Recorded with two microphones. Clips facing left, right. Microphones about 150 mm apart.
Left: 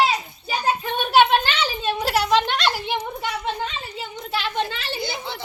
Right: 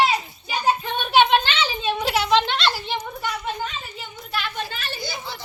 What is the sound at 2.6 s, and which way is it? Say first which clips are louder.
Speech: left 1 dB; 15° left (ahead or behind).